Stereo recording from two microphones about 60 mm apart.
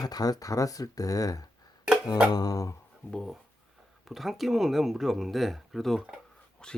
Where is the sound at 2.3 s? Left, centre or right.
Left.